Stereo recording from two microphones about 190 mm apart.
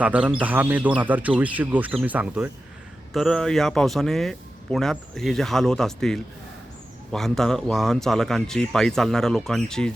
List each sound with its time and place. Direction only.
0.0 s speech: 5° right (ahead or behind)